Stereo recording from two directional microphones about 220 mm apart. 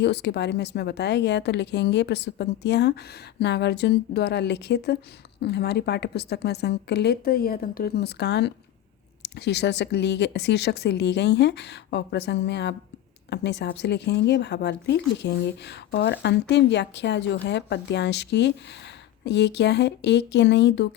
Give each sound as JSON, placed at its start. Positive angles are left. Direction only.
{"t": 0.0, "sound": "speech", "side_deg": 50}